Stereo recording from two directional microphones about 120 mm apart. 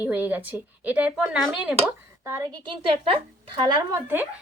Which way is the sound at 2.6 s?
45° right (ahead or behind).